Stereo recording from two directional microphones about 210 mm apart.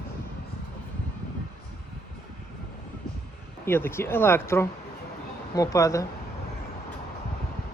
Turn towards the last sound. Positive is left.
turn(degrees=15)  # may be behind; listen again after turning